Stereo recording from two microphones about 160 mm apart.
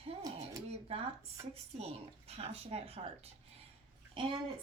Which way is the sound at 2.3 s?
40° right (ahead or behind).